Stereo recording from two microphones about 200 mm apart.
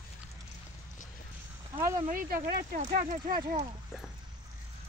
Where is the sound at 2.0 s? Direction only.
45° right (ahead or behind).